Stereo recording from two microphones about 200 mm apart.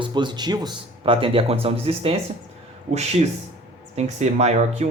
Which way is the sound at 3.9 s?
35° right (ahead or behind).